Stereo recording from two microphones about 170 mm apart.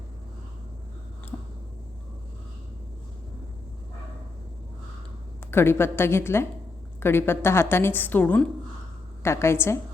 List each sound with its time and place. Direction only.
5.5 s a woman's voice: 15° left (ahead or behind)